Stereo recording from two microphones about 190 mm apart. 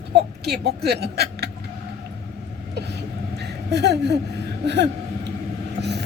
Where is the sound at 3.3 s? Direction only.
60° right (ahead or behind).